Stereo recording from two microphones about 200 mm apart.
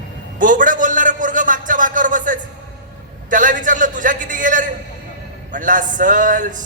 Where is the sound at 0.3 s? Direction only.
40° right (ahead or behind).